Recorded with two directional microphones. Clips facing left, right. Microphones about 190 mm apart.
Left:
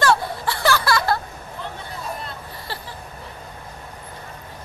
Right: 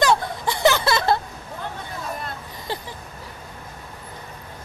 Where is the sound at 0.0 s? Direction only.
20° right (ahead or behind).